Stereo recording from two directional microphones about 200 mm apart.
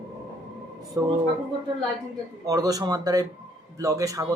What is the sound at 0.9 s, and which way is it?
Speech, 15° right (ahead or behind).